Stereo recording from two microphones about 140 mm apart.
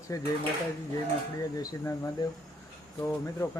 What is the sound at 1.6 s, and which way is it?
Speech, 25° left (ahead or behind).